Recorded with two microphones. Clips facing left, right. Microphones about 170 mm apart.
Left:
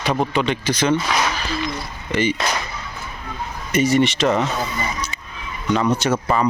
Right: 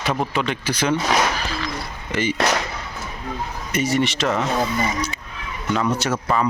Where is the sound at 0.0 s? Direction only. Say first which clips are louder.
Left 3 dB; centre (ahead or behind).